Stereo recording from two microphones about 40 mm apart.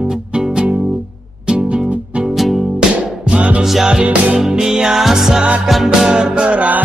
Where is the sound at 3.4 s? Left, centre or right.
Right.